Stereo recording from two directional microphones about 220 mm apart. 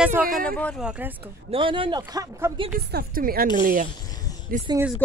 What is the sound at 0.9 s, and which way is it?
Speech, 10° right (ahead or behind).